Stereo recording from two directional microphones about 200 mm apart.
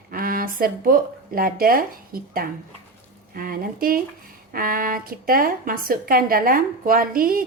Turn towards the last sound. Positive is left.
turn(degrees=-45)  # may be behind; listen again after turning